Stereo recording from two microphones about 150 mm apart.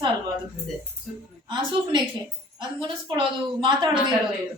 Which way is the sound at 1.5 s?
30° right (ahead or behind).